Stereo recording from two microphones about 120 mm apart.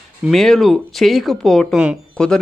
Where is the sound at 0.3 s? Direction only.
5° left (ahead or behind).